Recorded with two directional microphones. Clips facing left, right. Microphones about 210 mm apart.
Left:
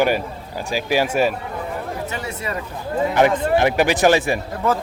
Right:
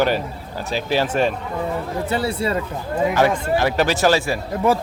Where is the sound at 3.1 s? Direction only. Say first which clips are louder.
Left 4 dB; 20° left (ahead or behind).